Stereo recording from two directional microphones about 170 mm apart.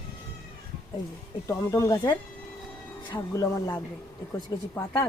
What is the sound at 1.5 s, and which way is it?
Speech, 20° left (ahead or behind).